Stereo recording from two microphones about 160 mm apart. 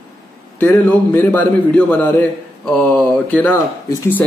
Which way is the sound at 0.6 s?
10° left (ahead or behind).